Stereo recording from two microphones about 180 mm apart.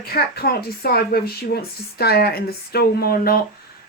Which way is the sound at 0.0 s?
55° left (ahead or behind).